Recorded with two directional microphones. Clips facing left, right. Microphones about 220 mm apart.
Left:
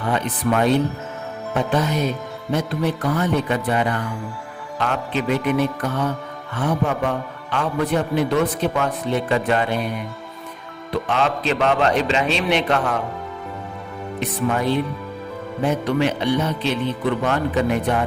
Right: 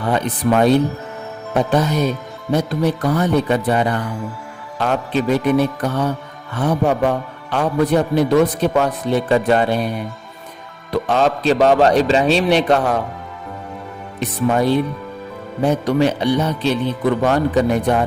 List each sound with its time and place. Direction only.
0.1 s a man's voice: 35° right (ahead or behind)
10.9 s a man's voice: 40° right (ahead or behind)
14.2 s a man's voice: 35° right (ahead or behind)